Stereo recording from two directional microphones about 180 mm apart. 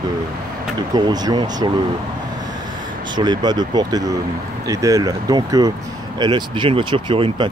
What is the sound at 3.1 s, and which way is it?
Speech, 25° right (ahead or behind).